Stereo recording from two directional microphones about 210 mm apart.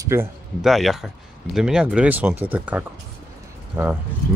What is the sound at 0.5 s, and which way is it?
Speech, centre (ahead or behind).